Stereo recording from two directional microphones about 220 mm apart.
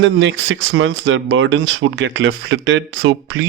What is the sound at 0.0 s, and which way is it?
Speech, 60° right (ahead or behind).